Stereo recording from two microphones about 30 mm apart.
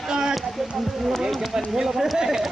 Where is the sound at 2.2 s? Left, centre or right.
Centre.